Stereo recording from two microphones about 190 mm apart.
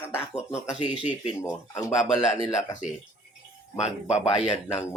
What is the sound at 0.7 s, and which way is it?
Speech, 5° right (ahead or behind).